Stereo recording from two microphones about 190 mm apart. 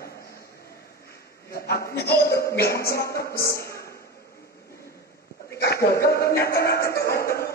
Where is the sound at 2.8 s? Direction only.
55° left (ahead or behind).